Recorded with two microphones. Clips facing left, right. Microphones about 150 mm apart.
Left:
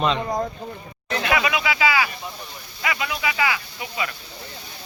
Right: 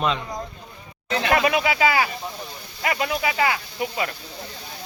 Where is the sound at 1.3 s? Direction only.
45° right (ahead or behind).